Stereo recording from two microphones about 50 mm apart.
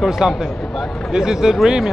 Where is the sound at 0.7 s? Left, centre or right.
Centre.